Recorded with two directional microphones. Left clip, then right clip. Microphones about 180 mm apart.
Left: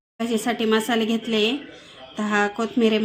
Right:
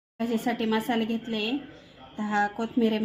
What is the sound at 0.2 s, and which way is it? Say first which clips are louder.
A woman's voice: left 5 dB; 35° left (ahead or behind).